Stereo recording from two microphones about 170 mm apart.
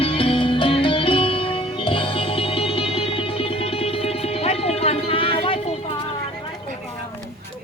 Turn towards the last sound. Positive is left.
turn(degrees=35)  # may be behind; listen again after turning